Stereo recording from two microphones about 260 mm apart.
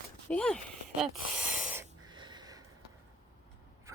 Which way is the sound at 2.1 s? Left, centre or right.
Centre.